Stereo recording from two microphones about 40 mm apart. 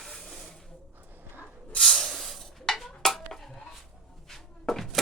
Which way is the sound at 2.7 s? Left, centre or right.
Centre.